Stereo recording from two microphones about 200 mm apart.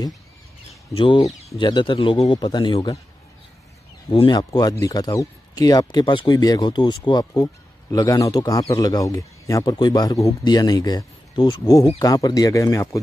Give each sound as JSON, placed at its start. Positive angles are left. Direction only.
{"t": 0.9, "sound": "speech", "side_deg": 25}
{"t": 4.1, "sound": "speech", "side_deg": 25}